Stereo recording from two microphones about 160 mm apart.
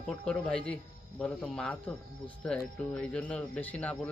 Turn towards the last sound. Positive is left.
turn(degrees=10)  # may be behind; listen again after turning